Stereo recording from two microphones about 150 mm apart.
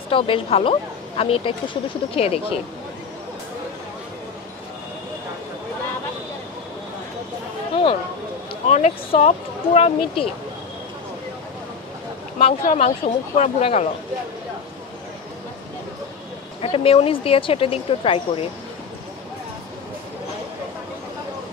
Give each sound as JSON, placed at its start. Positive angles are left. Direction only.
{"t": 0.1, "sound": "speech", "side_deg": 40}
{"t": 7.7, "sound": "a sound", "side_deg": 35}
{"t": 8.6, "sound": "speech", "side_deg": 45}
{"t": 12.6, "sound": "speech", "side_deg": 45}
{"t": 16.6, "sound": "speech", "side_deg": 40}